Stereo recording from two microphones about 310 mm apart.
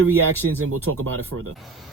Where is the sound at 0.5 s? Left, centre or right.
Right.